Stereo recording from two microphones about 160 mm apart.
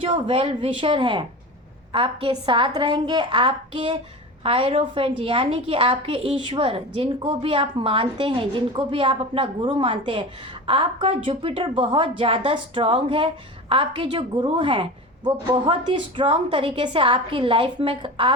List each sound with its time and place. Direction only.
0.0 s a woman's voice: 35° right (ahead or behind)